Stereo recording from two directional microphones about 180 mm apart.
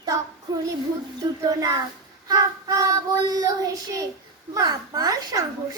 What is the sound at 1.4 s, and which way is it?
A child's voice, 20° right (ahead or behind).